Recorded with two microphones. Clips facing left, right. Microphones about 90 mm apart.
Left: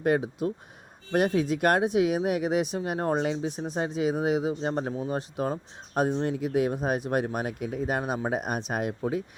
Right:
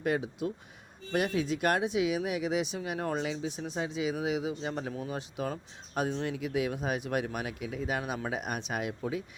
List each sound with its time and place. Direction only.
0.0 s speech: 50° left (ahead or behind)